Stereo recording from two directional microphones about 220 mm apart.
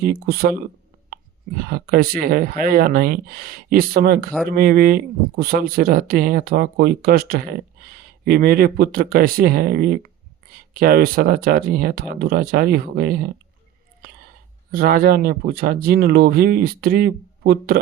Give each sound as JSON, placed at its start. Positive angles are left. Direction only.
{"t": 0.0, "sound": "speech", "side_deg": -45}
{"t": 1.6, "sound": "speech", "side_deg": -45}
{"t": 14.0, "sound": "whispering", "side_deg": -40}
{"t": 14.7, "sound": "speech", "side_deg": -40}